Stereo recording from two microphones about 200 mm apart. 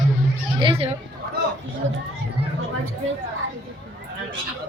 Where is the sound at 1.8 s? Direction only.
75° right (ahead or behind).